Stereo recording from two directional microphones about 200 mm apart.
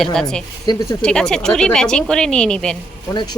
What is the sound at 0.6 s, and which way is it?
Speech, 20° left (ahead or behind).